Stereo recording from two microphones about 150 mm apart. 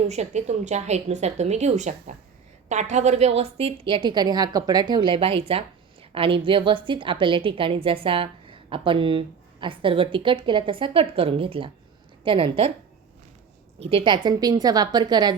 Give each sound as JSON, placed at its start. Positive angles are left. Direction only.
{"t": 0.0, "sound": "a woman's voice", "side_deg": -50}
{"t": 13.7, "sound": "a woman's voice", "side_deg": -40}